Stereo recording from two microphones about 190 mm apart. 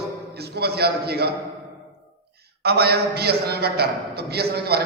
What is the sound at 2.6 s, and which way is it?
A man's voice, 55° right (ahead or behind).